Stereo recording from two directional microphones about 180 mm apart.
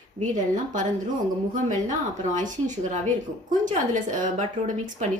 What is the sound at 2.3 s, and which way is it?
A woman's voice, 45° right (ahead or behind).